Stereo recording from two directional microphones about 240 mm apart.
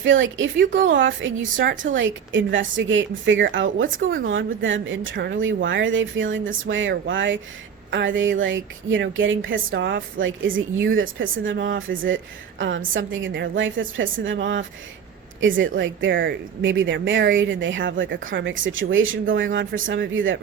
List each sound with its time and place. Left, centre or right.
0.0 s a woman's voice: right
0.6 s a woman's voice: right
0.9 s a woman's voice: right